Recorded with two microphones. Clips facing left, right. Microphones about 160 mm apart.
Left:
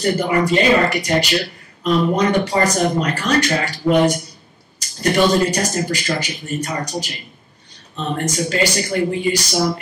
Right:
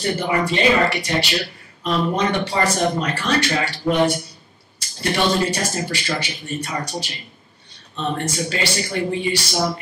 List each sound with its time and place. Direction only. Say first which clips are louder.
0.0 s a man's voice: left 4 dB; 40° left (ahead or behind)
8.3 s a man's voice: left 4 dB; 40° left (ahead or behind)